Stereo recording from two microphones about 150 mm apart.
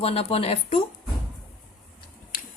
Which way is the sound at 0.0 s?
40° left (ahead or behind).